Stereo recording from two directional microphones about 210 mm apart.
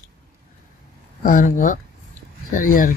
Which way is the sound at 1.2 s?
40° left (ahead or behind).